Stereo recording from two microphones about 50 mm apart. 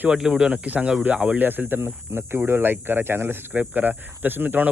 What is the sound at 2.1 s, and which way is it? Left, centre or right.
Speech, right.